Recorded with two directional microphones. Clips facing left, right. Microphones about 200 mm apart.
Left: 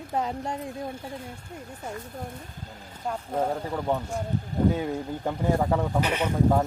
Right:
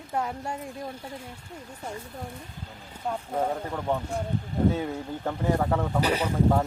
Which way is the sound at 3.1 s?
Centre (ahead or behind).